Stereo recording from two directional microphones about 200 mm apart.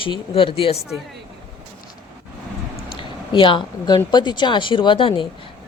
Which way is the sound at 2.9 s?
25° left (ahead or behind).